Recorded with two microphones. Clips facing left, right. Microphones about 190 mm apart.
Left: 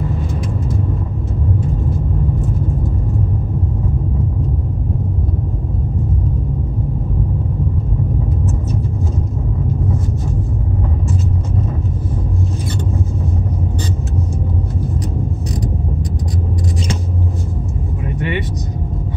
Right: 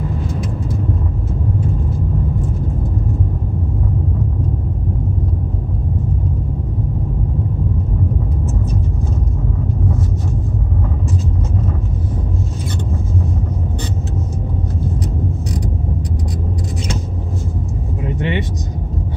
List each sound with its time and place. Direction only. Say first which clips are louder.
18.0 s vehicle: right 1 dB; 20° right (ahead or behind)